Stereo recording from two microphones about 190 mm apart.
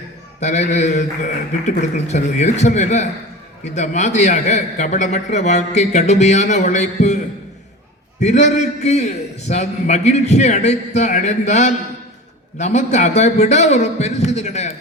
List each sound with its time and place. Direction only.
0.3 s a man's voice: 35° left (ahead or behind)
8.2 s a man's voice: 40° left (ahead or behind)